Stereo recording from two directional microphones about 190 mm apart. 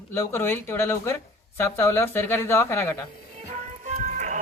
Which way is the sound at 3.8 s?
40° right (ahead or behind).